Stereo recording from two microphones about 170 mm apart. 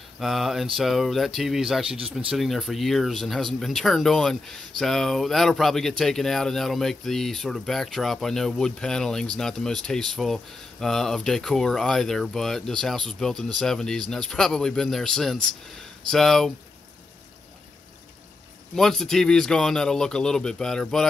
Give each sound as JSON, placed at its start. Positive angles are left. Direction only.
{"t": 0.2, "sound": "speech", "side_deg": 0}
{"t": 18.8, "sound": "speech", "side_deg": 0}